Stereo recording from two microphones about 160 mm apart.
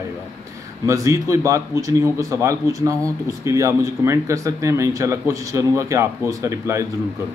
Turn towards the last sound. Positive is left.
turn(degrees=-20)  # may be behind; listen again after turning